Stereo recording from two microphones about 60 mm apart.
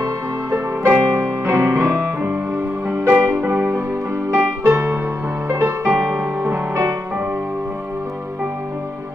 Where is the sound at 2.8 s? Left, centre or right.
Right.